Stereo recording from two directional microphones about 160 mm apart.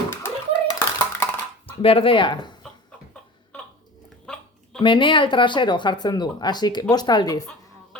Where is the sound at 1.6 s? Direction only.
35° left (ahead or behind).